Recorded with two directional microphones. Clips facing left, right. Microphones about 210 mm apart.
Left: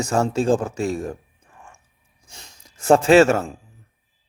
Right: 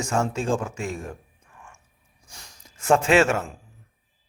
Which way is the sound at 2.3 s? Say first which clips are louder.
Left 2 dB; 25° left (ahead or behind).